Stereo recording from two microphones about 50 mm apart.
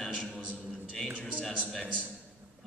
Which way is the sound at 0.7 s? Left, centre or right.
Centre.